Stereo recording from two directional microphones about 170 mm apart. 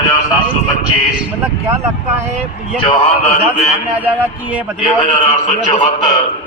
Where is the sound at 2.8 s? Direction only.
35° left (ahead or behind).